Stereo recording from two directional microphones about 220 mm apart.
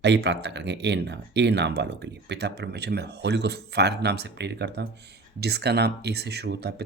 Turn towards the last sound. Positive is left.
turn(degrees=-50)  # may be behind; listen again after turning